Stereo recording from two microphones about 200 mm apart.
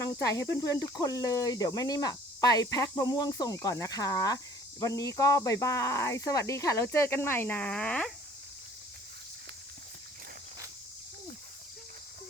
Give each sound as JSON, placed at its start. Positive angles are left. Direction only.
{"t": 0.2, "sound": "speech", "side_deg": 15}